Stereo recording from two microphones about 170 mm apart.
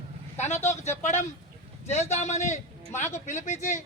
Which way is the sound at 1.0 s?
45° left (ahead or behind).